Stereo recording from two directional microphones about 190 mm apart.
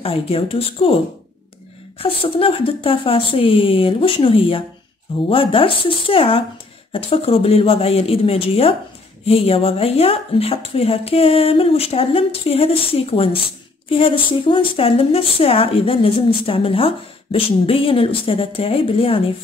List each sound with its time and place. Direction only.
0.0 s speech: 30° left (ahead or behind)
2.0 s speech: 30° left (ahead or behind)